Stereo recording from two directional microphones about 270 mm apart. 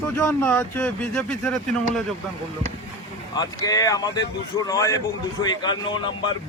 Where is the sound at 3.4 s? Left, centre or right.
Centre.